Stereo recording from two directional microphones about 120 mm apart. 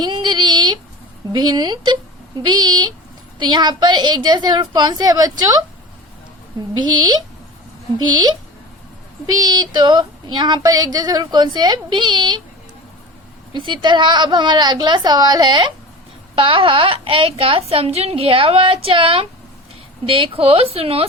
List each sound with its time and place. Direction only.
0.0 s child singing: 40° right (ahead or behind)
1.3 s speech: 40° right (ahead or behind)
6.7 s speech: 35° right (ahead or behind)
13.5 s a woman's voice: 40° right (ahead or behind)